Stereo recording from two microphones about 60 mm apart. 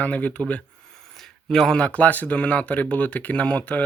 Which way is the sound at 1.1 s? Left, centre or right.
Centre.